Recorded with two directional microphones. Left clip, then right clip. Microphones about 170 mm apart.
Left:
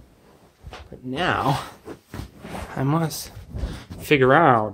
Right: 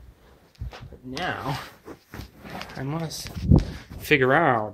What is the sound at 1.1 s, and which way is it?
Speech, 30° left (ahead or behind).